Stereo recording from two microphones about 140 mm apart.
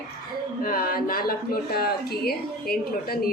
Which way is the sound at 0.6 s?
90° left.